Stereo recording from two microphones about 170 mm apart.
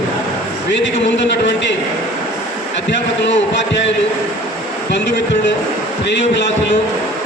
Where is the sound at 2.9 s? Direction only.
90° left.